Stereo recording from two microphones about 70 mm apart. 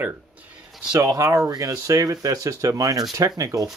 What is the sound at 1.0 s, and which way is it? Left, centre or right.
Speech, right.